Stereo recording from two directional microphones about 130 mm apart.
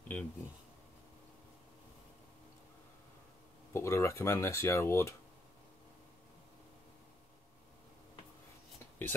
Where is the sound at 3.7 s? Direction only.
20° left (ahead or behind).